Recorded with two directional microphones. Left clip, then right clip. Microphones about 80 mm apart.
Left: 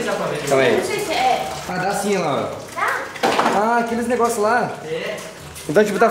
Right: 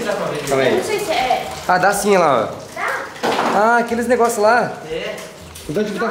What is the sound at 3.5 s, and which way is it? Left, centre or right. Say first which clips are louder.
Speech: right 3 dB; centre.